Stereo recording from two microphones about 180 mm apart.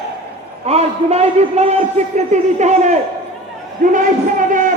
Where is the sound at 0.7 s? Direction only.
35° right (ahead or behind).